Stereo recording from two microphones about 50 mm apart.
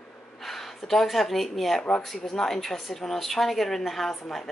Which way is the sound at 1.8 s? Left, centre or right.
Centre.